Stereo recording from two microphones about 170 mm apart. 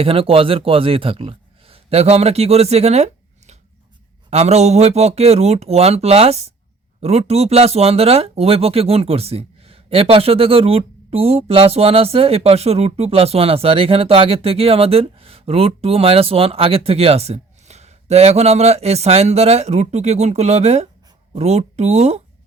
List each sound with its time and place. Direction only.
0.0 s speech: 35° right (ahead or behind)